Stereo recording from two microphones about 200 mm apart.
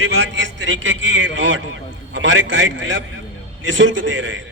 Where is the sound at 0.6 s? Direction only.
70° right (ahead or behind).